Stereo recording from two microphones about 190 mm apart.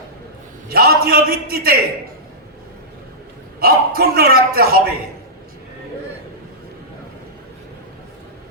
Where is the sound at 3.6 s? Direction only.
55° right (ahead or behind).